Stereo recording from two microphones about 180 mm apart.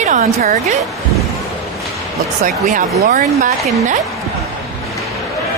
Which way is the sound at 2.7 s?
50° right (ahead or behind).